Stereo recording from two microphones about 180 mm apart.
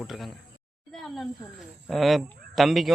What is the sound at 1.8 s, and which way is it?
Speech, centre (ahead or behind).